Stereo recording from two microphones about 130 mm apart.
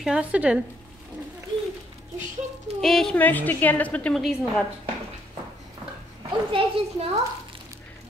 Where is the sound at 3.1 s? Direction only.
15° left (ahead or behind).